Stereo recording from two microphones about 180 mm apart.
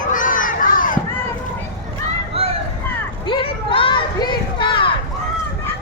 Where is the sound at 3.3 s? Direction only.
25° left (ahead or behind).